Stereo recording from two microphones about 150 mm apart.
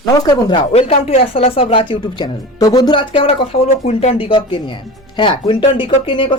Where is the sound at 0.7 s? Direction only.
40° left (ahead or behind).